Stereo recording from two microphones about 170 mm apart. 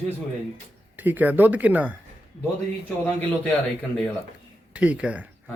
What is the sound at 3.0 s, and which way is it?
Speech, 10° left (ahead or behind).